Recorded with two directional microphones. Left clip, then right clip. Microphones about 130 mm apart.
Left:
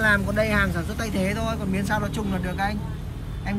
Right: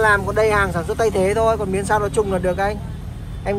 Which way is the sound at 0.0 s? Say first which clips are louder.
Right 6 dB; 15° right (ahead or behind).